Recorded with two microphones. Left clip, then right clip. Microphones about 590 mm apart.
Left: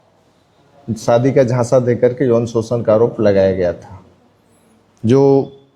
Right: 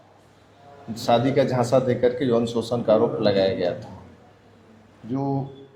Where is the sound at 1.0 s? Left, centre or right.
Left.